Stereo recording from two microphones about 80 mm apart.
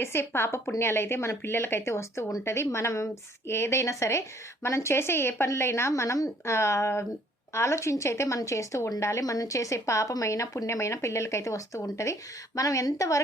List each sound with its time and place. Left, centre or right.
0.0 s a woman's voice: left